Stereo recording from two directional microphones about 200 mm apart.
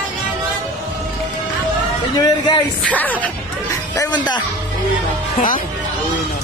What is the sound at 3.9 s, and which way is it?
Speech, 15° left (ahead or behind).